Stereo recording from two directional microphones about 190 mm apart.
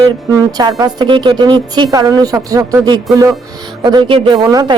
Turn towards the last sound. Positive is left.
turn(degrees=-20)  # may be behind; listen again after turning